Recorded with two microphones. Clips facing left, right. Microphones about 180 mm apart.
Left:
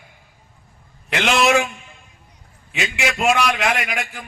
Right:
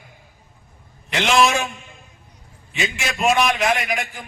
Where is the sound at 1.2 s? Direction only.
70° left (ahead or behind).